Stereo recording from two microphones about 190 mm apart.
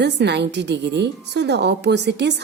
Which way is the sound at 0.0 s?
65° right (ahead or behind).